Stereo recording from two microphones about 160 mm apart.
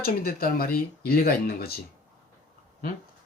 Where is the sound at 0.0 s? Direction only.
70° left (ahead or behind).